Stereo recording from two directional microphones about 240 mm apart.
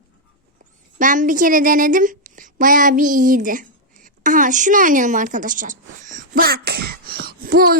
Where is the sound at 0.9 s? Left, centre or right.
Right.